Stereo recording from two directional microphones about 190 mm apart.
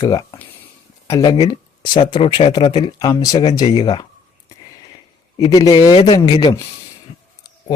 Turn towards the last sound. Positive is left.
turn(degrees=20)  # may be behind; listen again after turning